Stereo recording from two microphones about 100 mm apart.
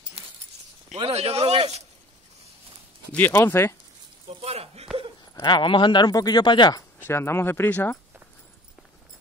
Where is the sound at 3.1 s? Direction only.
20° left (ahead or behind).